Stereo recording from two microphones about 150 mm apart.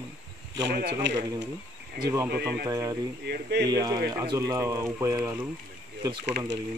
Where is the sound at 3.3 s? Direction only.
90° right.